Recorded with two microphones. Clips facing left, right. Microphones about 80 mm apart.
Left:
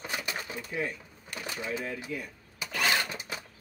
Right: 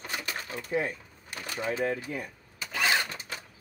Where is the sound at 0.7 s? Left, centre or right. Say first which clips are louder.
Right 5 dB; right.